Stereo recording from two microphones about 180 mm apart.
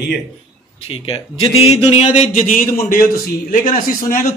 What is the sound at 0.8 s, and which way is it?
A man's voice, 30° left (ahead or behind).